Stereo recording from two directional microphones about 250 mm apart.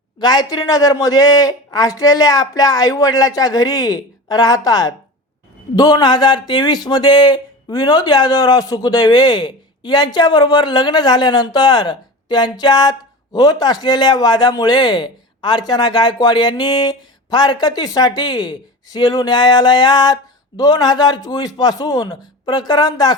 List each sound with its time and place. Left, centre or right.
0.2 s a man's voice: centre